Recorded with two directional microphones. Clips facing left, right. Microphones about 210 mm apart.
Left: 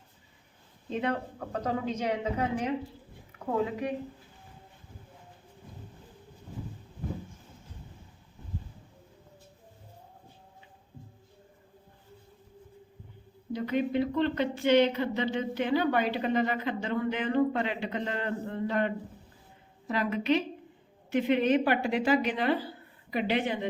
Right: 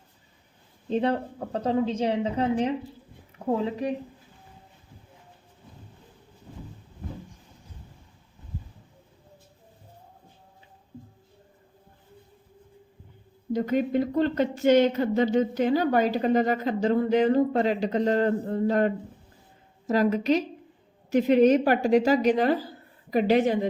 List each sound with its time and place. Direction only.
0.9 s a woman's voice: 35° right (ahead or behind)
13.5 s speech: 45° right (ahead or behind)